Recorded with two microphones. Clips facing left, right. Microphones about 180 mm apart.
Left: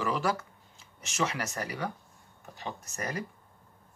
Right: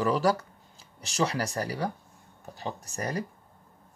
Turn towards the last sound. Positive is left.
turn(degrees=-35)  # may be behind; listen again after turning